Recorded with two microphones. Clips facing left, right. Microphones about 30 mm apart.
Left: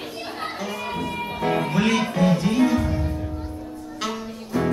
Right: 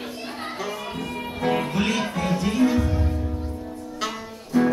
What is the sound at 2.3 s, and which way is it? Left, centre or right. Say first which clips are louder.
Music: left 1 dB; left.